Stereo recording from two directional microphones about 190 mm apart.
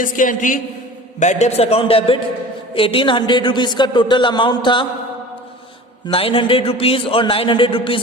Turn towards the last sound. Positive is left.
turn(degrees=25)  # may be behind; listen again after turning